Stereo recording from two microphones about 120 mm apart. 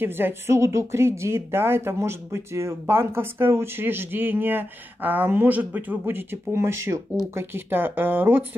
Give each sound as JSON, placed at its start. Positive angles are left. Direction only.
{"t": 0.0, "sound": "a woman's voice", "side_deg": -20}